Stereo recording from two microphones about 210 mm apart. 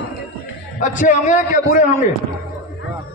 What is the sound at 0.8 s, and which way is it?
A man's voice, 35° left (ahead or behind).